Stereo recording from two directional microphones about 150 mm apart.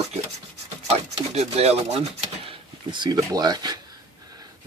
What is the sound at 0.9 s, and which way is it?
Speech, 45° right (ahead or behind).